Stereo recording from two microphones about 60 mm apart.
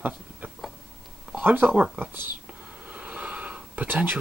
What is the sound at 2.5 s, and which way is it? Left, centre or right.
Gasp, right.